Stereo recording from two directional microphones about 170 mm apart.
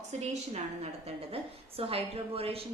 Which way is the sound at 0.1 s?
40° right (ahead or behind).